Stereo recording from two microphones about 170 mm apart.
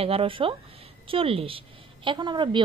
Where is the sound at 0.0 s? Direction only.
35° right (ahead or behind).